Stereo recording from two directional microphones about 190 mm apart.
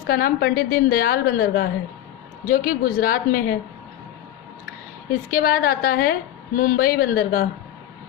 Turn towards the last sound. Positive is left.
turn(degrees=50)  # may be behind; listen again after turning